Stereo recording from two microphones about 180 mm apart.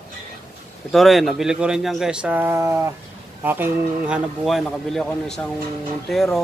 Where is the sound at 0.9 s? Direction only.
Centre (ahead or behind).